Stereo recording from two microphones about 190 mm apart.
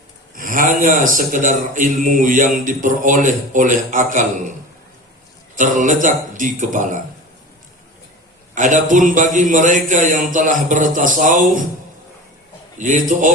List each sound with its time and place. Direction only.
0.3 s a man's voice: 45° right (ahead or behind)
5.5 s a man's voice: 40° right (ahead or behind)
8.5 s a man's voice: 40° right (ahead or behind)
12.8 s speech: 40° right (ahead or behind)